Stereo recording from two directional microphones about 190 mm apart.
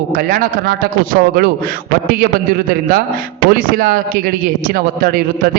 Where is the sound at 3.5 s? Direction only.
50° right (ahead or behind).